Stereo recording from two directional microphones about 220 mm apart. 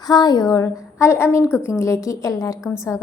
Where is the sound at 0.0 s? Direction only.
15° left (ahead or behind).